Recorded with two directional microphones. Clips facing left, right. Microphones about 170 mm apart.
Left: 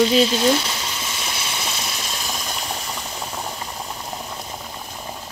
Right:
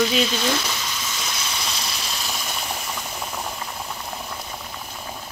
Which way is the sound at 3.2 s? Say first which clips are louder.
Left 1 dB; 10° left (ahead or behind).